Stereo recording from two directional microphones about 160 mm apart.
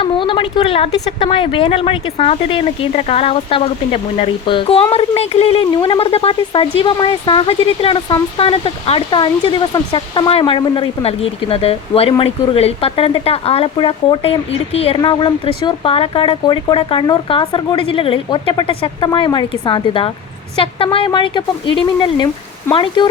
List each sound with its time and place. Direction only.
0.0 s speech: 30° left (ahead or behind)